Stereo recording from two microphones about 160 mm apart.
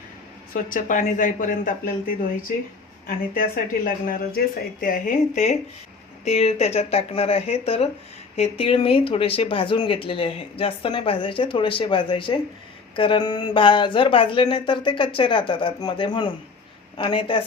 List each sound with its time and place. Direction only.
0.5 s speech: 55° left (ahead or behind); by 17.4 s 30° left (ahead or behind)